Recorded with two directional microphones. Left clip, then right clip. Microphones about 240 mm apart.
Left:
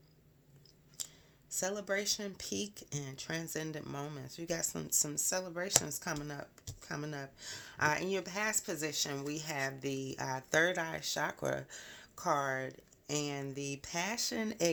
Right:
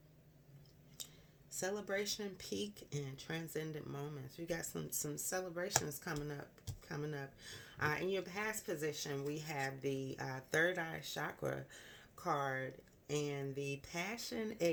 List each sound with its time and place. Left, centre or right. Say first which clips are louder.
1.5 s speech: left 5 dB; left